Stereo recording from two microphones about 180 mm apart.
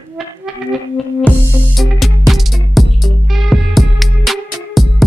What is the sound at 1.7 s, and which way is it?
Music, centre (ahead or behind).